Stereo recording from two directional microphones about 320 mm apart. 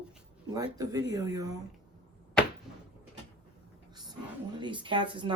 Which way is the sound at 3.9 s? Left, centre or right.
Centre.